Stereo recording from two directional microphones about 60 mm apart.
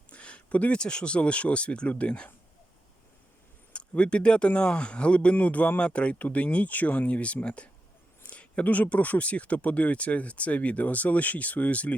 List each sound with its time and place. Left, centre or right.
0.1 s speech: centre
3.7 s speech: centre